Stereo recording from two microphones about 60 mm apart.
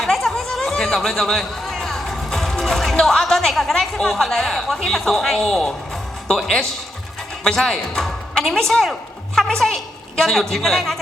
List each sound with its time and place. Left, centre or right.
0.0 s chatter: centre
3.0 s a woman's voice: centre